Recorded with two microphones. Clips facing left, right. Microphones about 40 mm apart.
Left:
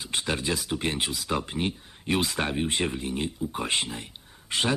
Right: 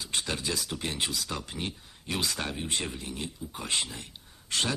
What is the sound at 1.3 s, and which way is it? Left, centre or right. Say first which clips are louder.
Speech: left 7 dB; left.